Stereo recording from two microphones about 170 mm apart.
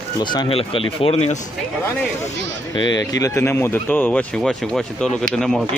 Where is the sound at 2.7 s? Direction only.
25° left (ahead or behind); by 5.6 s centre (ahead or behind).